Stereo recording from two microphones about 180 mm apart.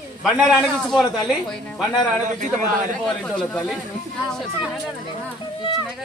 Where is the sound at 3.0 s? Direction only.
5° left (ahead or behind).